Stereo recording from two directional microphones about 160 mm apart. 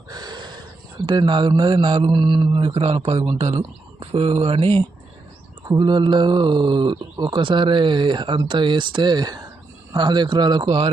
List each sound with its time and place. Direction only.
0.1 s a sound: 25° right (ahead or behind)
1.0 s speech: 30° right (ahead or behind)
2.7 s speech: 40° right (ahead or behind)